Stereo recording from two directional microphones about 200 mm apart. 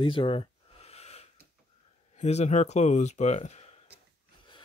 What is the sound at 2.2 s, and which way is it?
Speech, 35° left (ahead or behind).